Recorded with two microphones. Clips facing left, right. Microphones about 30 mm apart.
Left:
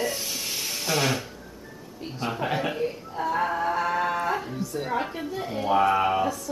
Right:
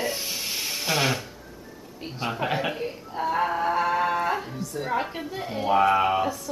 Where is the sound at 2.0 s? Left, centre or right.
Centre.